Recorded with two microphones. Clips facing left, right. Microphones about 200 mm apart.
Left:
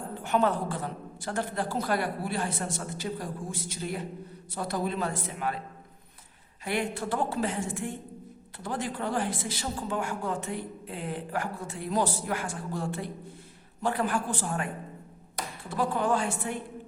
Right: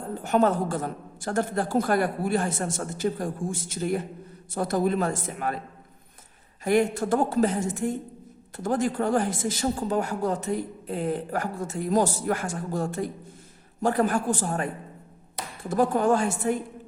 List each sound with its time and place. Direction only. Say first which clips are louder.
0.1 s speech: right 4 dB; 40° right (ahead or behind)
6.7 s speech: right 8 dB; 45° right (ahead or behind)
15.7 s speech: right 6 dB; 45° right (ahead or behind)